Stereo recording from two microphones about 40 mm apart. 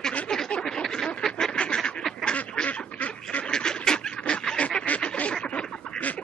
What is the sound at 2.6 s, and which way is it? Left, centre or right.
Duck, left.